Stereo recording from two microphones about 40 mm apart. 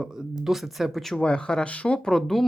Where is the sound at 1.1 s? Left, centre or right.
Left.